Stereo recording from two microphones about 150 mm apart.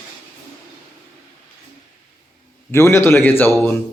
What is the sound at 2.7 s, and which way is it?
Speech, 20° left (ahead or behind).